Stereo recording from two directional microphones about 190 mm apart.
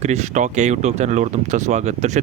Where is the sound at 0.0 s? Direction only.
35° right (ahead or behind).